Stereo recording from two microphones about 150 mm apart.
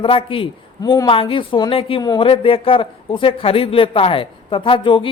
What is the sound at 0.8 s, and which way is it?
Speech, 25° left (ahead or behind).